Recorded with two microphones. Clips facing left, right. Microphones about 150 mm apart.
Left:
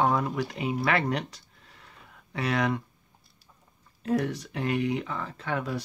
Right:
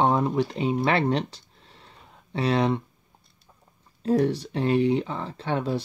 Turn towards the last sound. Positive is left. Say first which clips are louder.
# right 4 dB
turn(degrees=-30)  # may be behind; listen again after turning